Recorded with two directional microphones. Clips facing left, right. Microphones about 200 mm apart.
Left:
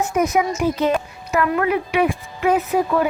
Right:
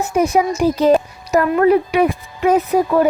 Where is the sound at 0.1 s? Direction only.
30° right (ahead or behind).